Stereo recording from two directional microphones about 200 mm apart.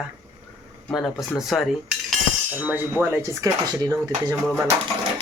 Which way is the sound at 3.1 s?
15° right (ahead or behind).